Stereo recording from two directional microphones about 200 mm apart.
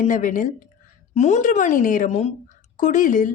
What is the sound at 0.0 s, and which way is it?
A woman's voice, 40° left (ahead or behind).